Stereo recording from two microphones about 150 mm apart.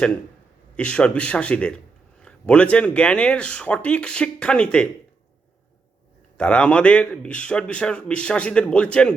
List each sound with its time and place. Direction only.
0.8 s a man's voice: 10° left (ahead or behind)
6.3 s a man's voice: 5° left (ahead or behind)